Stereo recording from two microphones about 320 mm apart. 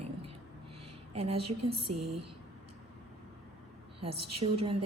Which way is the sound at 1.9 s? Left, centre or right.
Right.